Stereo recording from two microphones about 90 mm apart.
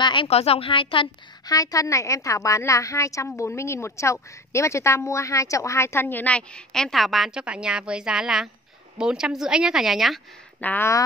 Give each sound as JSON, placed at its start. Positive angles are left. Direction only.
{"t": 0.0, "sound": "a woman's voice", "side_deg": 70}
{"t": 1.4, "sound": "a woman's voice", "side_deg": 40}
{"t": 10.6, "sound": "a woman's voice", "side_deg": 20}